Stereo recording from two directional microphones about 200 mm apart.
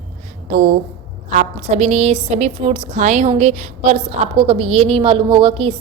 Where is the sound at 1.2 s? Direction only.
40° right (ahead or behind).